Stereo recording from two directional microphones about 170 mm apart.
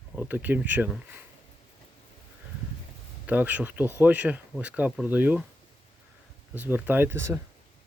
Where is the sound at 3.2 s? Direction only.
10° right (ahead or behind).